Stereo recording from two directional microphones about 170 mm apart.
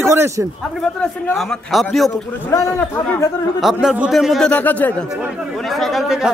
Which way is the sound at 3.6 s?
5° right (ahead or behind).